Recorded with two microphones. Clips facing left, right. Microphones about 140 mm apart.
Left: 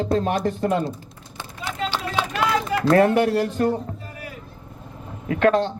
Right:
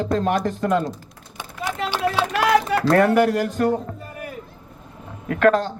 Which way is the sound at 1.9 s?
65° right (ahead or behind).